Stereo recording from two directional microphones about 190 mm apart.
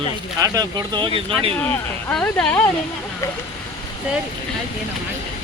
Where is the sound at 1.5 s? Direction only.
10° left (ahead or behind).